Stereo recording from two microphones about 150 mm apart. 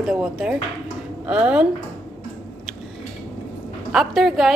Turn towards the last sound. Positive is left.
turn(degrees=0)  # may be behind; listen again after turning